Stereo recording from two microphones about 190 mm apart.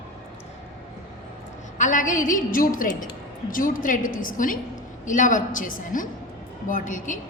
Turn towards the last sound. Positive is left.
turn(degrees=40)  # may be behind; listen again after turning